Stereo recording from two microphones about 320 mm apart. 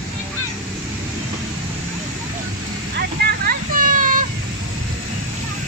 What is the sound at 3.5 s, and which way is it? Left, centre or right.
Children playing, right.